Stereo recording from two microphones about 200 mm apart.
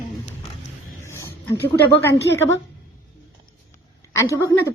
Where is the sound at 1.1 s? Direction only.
15° left (ahead or behind).